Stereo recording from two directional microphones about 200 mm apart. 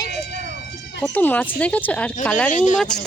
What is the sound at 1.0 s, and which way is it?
Speech, 10° left (ahead or behind).